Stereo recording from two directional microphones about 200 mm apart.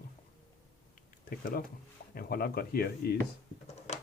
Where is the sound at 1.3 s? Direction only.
45° left (ahead or behind).